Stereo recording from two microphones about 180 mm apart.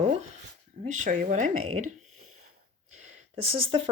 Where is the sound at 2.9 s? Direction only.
40° right (ahead or behind).